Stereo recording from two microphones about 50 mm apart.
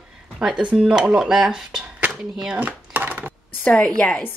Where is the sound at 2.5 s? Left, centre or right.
Right.